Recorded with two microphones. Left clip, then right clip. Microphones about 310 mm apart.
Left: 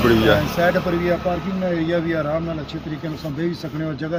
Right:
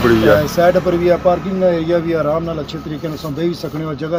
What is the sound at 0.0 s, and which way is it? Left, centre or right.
Speech, left.